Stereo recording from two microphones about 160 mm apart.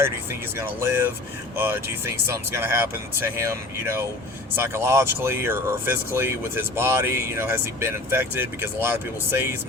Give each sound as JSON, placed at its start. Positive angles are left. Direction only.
{"t": 0.5, "sound": "speech", "side_deg": -15}